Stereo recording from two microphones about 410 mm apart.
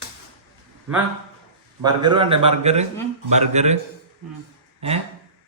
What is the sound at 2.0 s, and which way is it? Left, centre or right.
A man's voice, centre.